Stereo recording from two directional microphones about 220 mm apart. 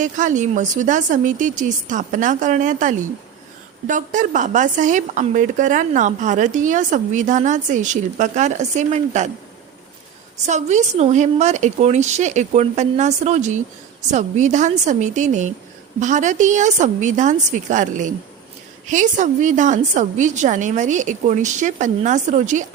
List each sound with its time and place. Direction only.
0.0 s speech: 35° right (ahead or behind)
10.3 s speech: 30° right (ahead or behind)